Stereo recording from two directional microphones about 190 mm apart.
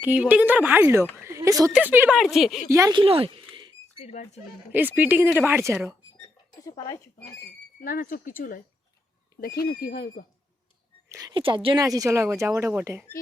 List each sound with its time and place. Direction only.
0.0 s speech: 10° right (ahead or behind)
1.2 s a sound: 15° right (ahead or behind)
1.7 s speech: 10° right (ahead or behind)
2.6 s speech: 15° right (ahead or behind)
4.0 s speech: 35° left (ahead or behind)
4.7 s speech: 10° right (ahead or behind)
6.7 s speech: 20° left (ahead or behind)
7.8 s speech: 50° left (ahead or behind)
9.6 s speech: 55° left (ahead or behind)
11.1 s speech: 20° right (ahead or behind)